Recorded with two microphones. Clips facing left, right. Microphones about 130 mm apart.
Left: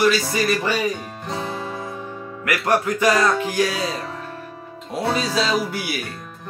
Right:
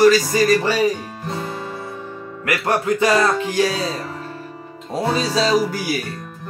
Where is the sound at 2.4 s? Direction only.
30° right (ahead or behind).